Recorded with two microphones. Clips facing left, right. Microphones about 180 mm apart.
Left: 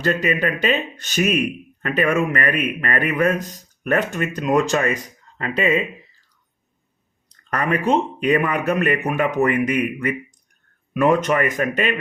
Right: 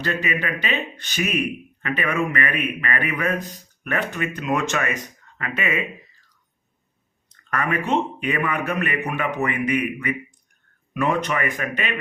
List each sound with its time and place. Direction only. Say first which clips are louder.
0.0 s a man's voice: left 5 dB; 40° left (ahead or behind)
7.5 s a man's voice: left 3 dB; 35° left (ahead or behind)